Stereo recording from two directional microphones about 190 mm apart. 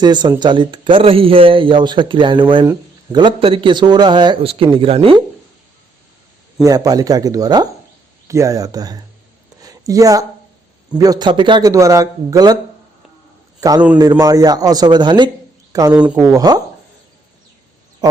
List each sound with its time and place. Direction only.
0.0 s speech: 20° right (ahead or behind)
6.6 s speech: 20° right (ahead or behind)
9.6 s a sound: 20° right (ahead or behind)
10.9 s speech: 20° right (ahead or behind)
13.6 s a man's voice: 20° right (ahead or behind)
16.0 s speech: 5° right (ahead or behind)
16.2 s speech: 20° right (ahead or behind)
18.0 s a sound: 20° right (ahead or behind)